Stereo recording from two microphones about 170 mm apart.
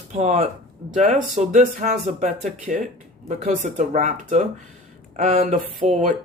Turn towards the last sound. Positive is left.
turn(degrees=-45)  # may be behind; listen again after turning